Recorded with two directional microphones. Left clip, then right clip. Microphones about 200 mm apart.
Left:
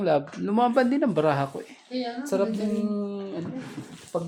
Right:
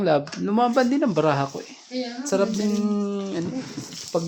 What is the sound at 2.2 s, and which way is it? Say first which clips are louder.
Music: right 4 dB; 25° right (ahead or behind).